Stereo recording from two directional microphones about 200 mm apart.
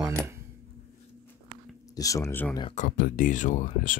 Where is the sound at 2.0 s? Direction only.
15° left (ahead or behind).